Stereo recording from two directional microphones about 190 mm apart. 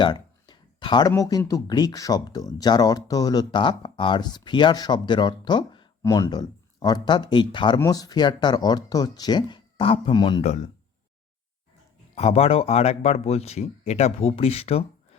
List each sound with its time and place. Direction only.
0.0 s speech: 25° left (ahead or behind)
12.1 s speech: 30° left (ahead or behind)